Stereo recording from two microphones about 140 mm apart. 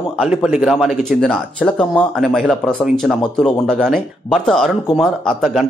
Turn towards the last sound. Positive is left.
turn(degrees=0)  # may be behind; listen again after turning